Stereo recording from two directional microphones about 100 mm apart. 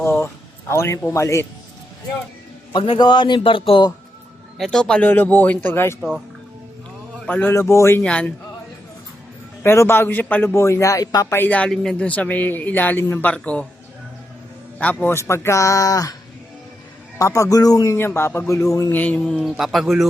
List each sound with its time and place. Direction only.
0.0 s a man's voice: 25° left (ahead or behind)
2.7 s speech: 55° left (ahead or behind)
4.5 s a man's voice: 5° left (ahead or behind); by 6.0 s 25° left (ahead or behind)
6.0 s speech: 5° right (ahead or behind)
7.3 s a man's voice: 15° left (ahead or behind)
7.5 s a man's voice: 30° left (ahead or behind)
8.0 s a man's voice: 10° left (ahead or behind)
9.6 s a man's voice: 25° left (ahead or behind)
11.3 s a man's voice: 20° left (ahead or behind)
11.7 s a man's voice: 5° left (ahead or behind)
14.8 s a man's voice: 15° left (ahead or behind)
15.1 s speech: 25° left (ahead or behind)
17.2 s speech: 30° left (ahead or behind)
17.9 s a man's voice: 25° left (ahead or behind); by 20.1 s centre (ahead or behind)